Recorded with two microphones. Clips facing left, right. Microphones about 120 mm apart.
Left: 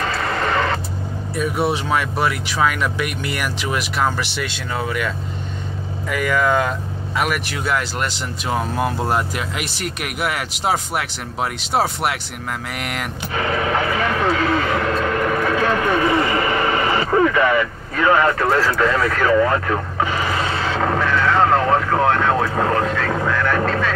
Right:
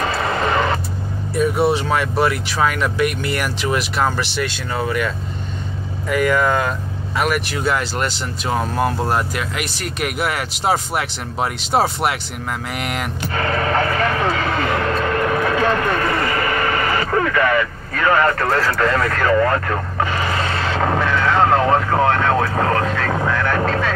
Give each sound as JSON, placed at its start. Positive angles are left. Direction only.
{"t": 0.0, "sound": "a sound", "side_deg": -10}
{"t": 1.6, "sound": "speech", "side_deg": 10}
{"t": 9.1, "sound": "speech", "side_deg": 20}
{"t": 12.7, "sound": "speech", "side_deg": 0}
{"t": 13.3, "sound": "vehicle", "side_deg": 10}